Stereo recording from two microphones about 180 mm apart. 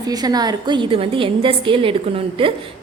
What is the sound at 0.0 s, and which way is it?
A woman's voice, 20° right (ahead or behind).